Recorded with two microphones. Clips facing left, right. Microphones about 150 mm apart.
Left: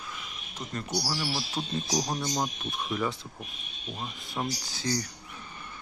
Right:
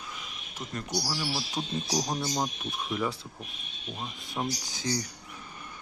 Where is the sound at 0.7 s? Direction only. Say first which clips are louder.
Left 1 dB; centre (ahead or behind).